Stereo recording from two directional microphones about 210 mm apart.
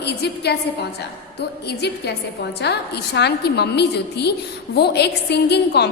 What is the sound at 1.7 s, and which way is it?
A woman's voice, 50° left (ahead or behind).